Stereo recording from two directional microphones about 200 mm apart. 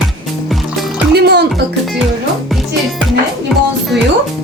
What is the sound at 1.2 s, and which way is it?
Music, 55° right (ahead or behind).